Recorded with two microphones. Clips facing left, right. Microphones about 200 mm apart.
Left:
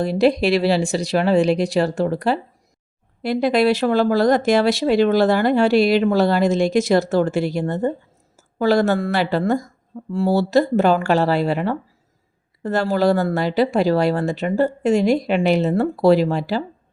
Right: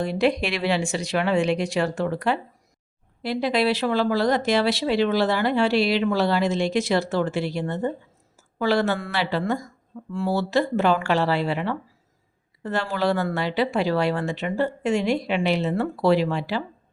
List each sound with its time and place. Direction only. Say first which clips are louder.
0.0 s a woman's voice: left 5 dB; 35° left (ahead or behind)
3.2 s a woman's voice: left 5 dB; 50° left (ahead or behind)